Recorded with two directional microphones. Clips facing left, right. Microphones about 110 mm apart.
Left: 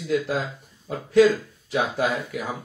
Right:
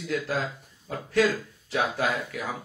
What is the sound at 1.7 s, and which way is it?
Speech, 15° left (ahead or behind).